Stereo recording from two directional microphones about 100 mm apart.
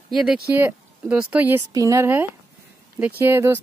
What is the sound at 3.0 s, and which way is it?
Speech, 20° right (ahead or behind).